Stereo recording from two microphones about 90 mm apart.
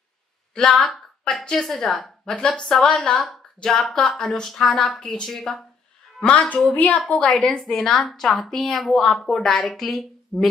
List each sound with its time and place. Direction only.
0.6 s a woman's voice: 10° left (ahead or behind)